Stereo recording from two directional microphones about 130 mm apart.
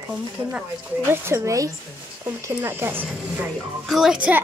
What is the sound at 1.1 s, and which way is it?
Speech, 20° right (ahead or behind).